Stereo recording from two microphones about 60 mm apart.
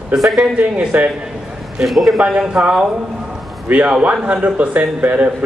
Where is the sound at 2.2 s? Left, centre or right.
Centre.